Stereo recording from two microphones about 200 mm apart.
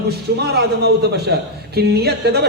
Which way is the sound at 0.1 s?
55° right (ahead or behind).